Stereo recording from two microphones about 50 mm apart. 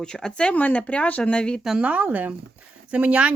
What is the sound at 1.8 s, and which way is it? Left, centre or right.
Speech, right.